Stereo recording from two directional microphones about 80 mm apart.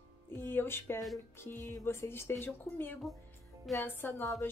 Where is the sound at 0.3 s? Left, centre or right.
Left.